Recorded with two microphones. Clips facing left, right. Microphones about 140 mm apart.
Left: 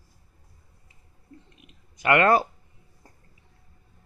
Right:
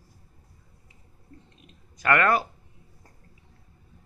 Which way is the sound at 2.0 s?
20° left (ahead or behind).